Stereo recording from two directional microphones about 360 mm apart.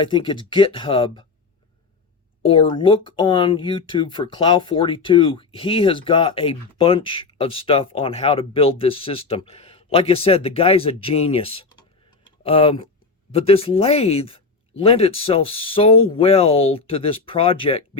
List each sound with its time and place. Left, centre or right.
0.0 s speech: centre
2.4 s speech: centre